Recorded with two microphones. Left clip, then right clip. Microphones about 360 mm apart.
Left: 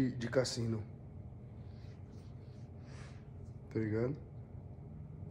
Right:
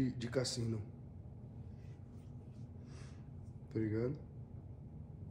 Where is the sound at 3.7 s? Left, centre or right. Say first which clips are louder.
Left 2 dB; centre.